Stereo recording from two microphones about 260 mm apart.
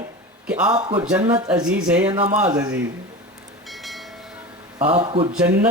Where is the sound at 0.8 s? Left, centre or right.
Centre.